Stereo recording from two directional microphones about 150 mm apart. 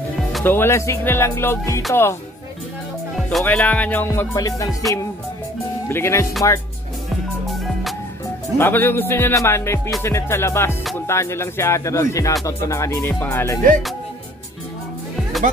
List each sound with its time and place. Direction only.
0.4 s music: 15° left (ahead or behind)
3.3 s music: 5° left (ahead or behind); by 4.6 s 20° left (ahead or behind)
5.9 s music: 15° left (ahead or behind)
8.5 s music: 15° left (ahead or behind)
11.1 s speech: 20° left (ahead or behind)